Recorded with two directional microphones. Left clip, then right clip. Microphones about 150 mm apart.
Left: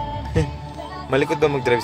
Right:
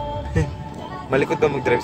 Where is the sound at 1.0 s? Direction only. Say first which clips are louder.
Even; 10° left (ahead or behind).